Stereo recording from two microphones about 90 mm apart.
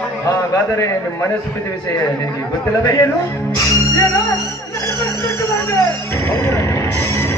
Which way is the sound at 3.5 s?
35° left (ahead or behind).